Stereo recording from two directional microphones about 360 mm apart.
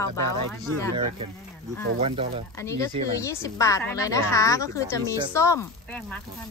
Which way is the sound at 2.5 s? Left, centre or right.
Centre.